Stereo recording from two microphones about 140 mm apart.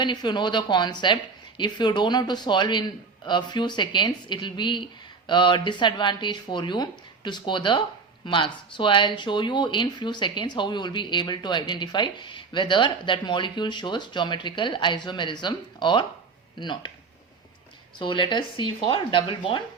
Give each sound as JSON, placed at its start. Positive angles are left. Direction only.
{"t": 0.0, "sound": "speech", "side_deg": 30}
{"t": 18.0, "sound": "speech", "side_deg": 35}